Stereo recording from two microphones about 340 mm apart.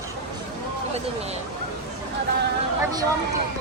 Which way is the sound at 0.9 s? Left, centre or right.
Centre.